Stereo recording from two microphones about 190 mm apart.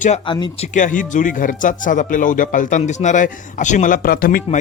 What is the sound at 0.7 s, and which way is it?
Speech, 40° left (ahead or behind).